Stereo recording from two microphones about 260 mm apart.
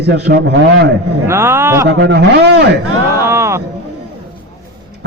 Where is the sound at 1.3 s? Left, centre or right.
Centre.